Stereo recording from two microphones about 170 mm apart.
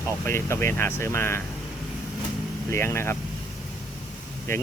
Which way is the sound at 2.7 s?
15° left (ahead or behind).